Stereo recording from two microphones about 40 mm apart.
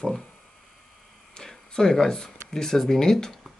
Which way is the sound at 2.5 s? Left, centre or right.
Centre.